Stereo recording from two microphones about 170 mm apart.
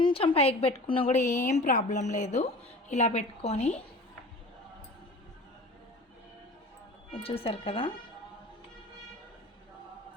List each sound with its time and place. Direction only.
0.0 s a woman's voice: 30° left (ahead or behind)
7.1 s a woman's voice: 35° left (ahead or behind)